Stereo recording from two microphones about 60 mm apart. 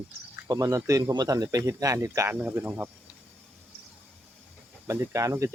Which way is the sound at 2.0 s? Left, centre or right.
Right.